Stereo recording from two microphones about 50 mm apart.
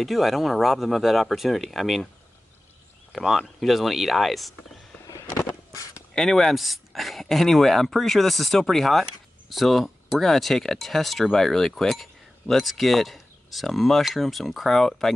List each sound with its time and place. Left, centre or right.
0.0 s speech: centre
3.1 s speech: centre
6.1 s speech: centre